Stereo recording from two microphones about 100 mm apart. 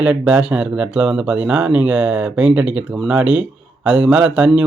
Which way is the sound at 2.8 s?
Centre (ahead or behind).